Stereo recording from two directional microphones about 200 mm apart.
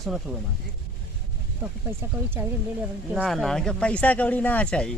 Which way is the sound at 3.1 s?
5° right (ahead or behind).